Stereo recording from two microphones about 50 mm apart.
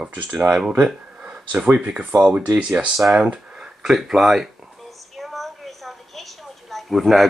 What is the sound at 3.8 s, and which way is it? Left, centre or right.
Speech, centre.